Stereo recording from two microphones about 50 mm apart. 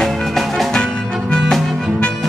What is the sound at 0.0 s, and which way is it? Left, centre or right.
Music, centre.